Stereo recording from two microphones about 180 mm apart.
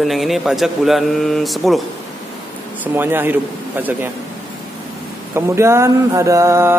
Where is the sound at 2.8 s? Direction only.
10° right (ahead or behind).